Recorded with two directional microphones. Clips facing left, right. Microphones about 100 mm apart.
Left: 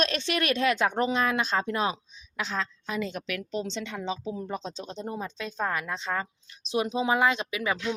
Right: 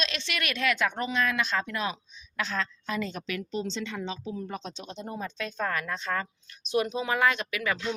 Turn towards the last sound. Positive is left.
turn(degrees=20)  # may be behind; listen again after turning